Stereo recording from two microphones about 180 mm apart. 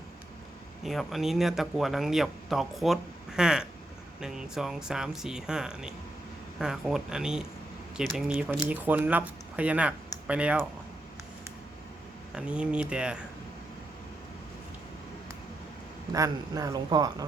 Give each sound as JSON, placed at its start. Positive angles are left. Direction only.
{"t": 0.9, "sound": "speech", "side_deg": 0}
{"t": 12.3, "sound": "speech", "side_deg": -5}
{"t": 16.1, "sound": "speech", "side_deg": -20}